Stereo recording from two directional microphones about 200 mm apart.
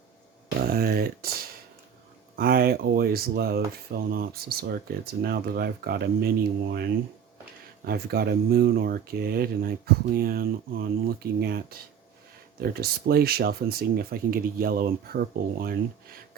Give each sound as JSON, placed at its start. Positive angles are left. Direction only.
{"t": 0.7, "sound": "speech", "side_deg": -50}
{"t": 2.3, "sound": "speech", "side_deg": -50}